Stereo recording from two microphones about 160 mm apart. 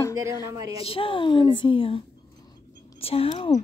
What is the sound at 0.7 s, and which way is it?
Speech, 35° left (ahead or behind).